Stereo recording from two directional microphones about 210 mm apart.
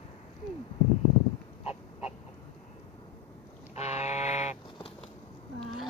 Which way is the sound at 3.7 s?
30° left (ahead or behind).